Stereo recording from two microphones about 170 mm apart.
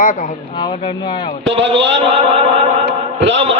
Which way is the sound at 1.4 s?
90° right.